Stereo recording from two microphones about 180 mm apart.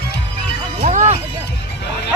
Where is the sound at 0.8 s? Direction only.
40° right (ahead or behind).